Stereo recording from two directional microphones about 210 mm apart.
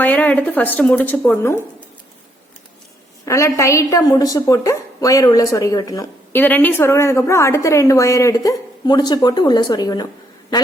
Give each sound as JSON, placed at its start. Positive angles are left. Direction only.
{"t": 0.0, "sound": "a woman's voice", "side_deg": 5}
{"t": 3.2, "sound": "a woman's voice", "side_deg": 15}